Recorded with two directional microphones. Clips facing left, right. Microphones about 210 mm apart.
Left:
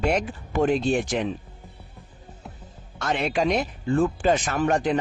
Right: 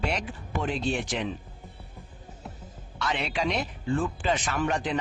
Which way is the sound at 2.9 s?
45° left (ahead or behind).